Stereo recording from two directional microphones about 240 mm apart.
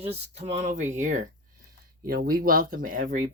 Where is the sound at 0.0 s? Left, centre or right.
Right.